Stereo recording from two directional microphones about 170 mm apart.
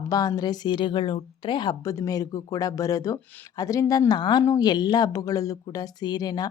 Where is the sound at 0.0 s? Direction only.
20° left (ahead or behind).